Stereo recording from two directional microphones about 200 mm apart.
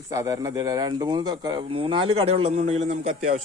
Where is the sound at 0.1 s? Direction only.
15° right (ahead or behind); by 3.4 s 35° right (ahead or behind).